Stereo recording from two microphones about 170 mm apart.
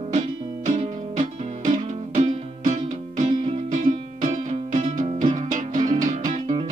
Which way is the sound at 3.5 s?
50° right (ahead or behind).